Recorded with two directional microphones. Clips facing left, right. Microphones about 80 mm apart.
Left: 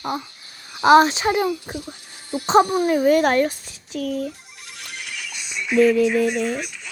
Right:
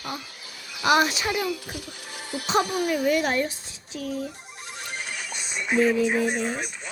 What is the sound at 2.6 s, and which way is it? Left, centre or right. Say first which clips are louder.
Speech: left 7 dB; right.